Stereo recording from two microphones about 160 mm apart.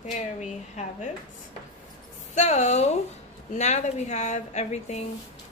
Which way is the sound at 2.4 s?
45° left (ahead or behind).